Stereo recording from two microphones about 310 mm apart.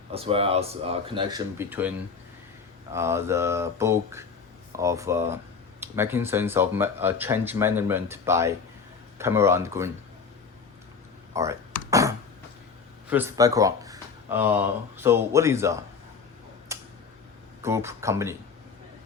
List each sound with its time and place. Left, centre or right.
0.1 s speech: centre
2.9 s speech: centre
11.3 s a sound: centre
13.1 s speech: centre
16.7 s tick-tock: centre
17.6 s speech: centre